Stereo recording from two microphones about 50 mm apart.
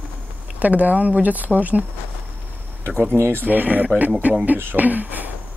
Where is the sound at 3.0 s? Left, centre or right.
Right.